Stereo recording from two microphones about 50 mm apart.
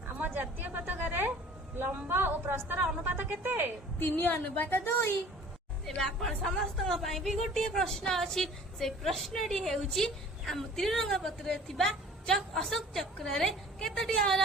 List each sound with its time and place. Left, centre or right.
0.1 s a sound: right
2.0 s a woman's voice: right
4.0 s a woman's voice: left
6.0 s a woman's voice: centre